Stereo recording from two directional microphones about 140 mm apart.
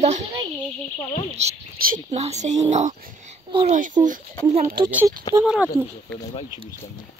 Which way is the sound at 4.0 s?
30° right (ahead or behind).